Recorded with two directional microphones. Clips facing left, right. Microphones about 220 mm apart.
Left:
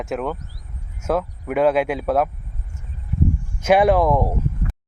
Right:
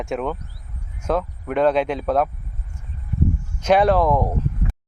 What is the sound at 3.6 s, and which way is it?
Speech, 10° left (ahead or behind).